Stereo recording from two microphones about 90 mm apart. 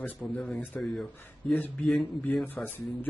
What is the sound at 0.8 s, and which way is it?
Mantra, centre (ahead or behind).